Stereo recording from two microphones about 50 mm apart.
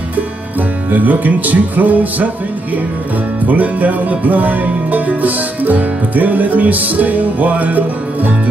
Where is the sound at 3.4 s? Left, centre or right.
Right.